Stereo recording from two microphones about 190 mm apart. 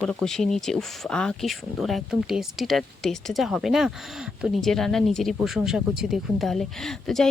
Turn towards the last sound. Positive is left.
turn(degrees=0)  # may be behind; listen again after turning